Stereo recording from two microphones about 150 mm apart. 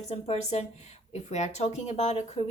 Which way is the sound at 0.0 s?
50° left (ahead or behind).